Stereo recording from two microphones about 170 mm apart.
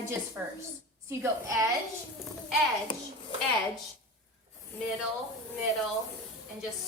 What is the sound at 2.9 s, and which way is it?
Speech, 30° left (ahead or behind).